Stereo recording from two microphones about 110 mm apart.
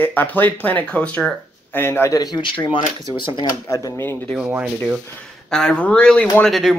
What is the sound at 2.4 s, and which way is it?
Speech, 50° left (ahead or behind).